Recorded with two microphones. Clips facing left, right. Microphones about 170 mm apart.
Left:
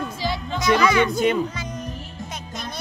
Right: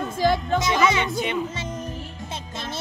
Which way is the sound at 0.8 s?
25° right (ahead or behind).